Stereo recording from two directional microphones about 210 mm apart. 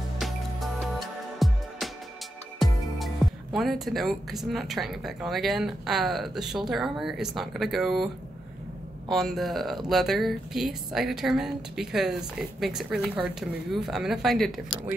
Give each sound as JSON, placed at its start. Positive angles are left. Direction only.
{"t": 0.2, "sound": "music", "side_deg": 0}
{"t": 3.2, "sound": "music", "side_deg": 0}
{"t": 3.5, "sound": "a woman's voice", "side_deg": 0}
{"t": 9.1, "sound": "a woman's voice", "side_deg": 0}